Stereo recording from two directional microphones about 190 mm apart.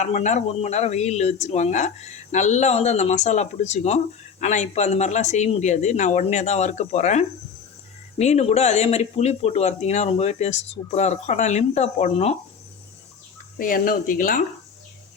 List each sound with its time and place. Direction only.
0.0 s speech: 40° left (ahead or behind)
13.6 s speech: 45° left (ahead or behind)